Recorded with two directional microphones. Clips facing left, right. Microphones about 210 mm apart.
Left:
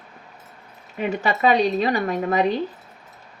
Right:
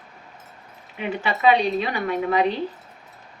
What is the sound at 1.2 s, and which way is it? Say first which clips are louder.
A woman's voice: even; 40° left (ahead or behind).